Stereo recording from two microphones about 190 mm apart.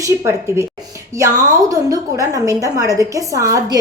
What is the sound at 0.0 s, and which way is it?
A woman's voice, 15° right (ahead or behind).